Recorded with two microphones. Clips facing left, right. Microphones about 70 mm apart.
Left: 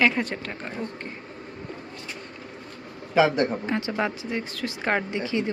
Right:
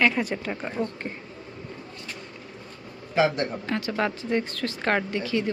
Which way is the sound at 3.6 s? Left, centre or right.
Centre.